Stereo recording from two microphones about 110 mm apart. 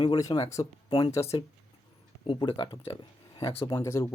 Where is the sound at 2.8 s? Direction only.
60° left (ahead or behind).